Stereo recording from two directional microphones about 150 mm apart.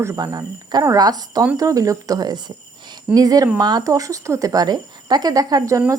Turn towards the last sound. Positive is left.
turn(degrees=-20)  # may be behind; listen again after turning